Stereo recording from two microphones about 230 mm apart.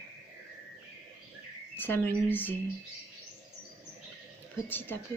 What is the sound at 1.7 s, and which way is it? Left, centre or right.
Speech, centre.